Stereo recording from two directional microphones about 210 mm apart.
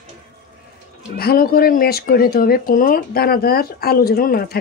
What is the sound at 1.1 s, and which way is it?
Speech, 45° left (ahead or behind).